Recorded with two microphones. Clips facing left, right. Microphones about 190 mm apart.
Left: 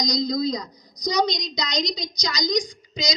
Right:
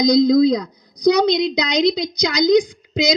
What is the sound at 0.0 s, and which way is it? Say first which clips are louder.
A woman's voice: right 11 dB; 55° right (ahead or behind).